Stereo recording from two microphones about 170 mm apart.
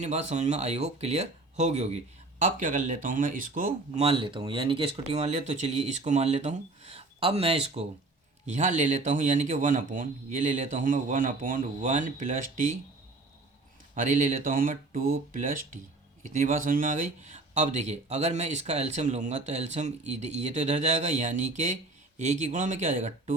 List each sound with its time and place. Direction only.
0.0 s speech: 40° right (ahead or behind)
4.0 s speech: 30° right (ahead or behind); by 12.7 s 50° right (ahead or behind)
13.9 s speech: 45° right (ahead or behind)